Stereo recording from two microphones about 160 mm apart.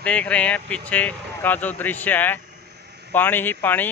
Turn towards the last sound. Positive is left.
turn(degrees=10)  # may be behind; listen again after turning